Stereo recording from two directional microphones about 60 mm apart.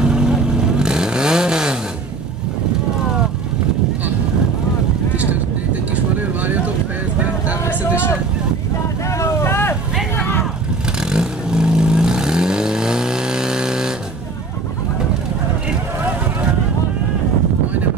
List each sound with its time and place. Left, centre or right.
0.0 s vehicle: centre
5.1 s vehicle: right
9.1 s vehicle: left
10.1 s vehicle: left
11.0 s vehicle: centre